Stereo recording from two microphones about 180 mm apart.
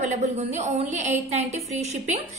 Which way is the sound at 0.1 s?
40° right (ahead or behind).